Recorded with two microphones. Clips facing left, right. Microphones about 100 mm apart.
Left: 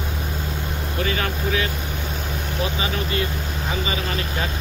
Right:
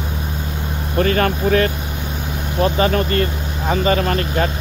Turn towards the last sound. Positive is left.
turn(degrees=-50)  # may be behind; listen again after turning